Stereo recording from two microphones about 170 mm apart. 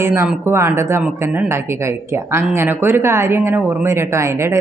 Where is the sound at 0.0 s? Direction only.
15° right (ahead or behind).